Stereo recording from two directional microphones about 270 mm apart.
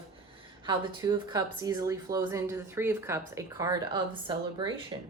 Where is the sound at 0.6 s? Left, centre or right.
Centre.